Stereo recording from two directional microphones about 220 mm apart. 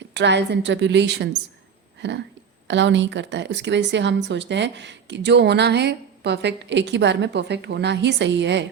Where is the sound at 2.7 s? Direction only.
55° right (ahead or behind).